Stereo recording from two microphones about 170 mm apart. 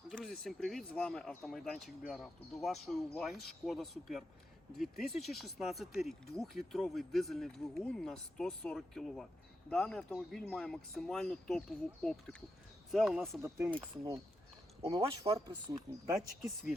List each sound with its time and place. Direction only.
0.1 s speech: centre (ahead or behind)
13.9 s speech: 25° right (ahead or behind)
16.1 s speech: centre (ahead or behind)